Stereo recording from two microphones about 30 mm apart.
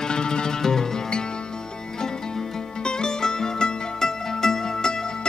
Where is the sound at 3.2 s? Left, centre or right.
Centre.